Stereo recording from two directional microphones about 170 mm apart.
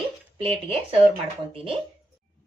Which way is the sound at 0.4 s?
35° right (ahead or behind).